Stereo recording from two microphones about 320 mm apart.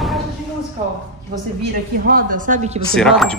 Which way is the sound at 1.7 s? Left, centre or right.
Right.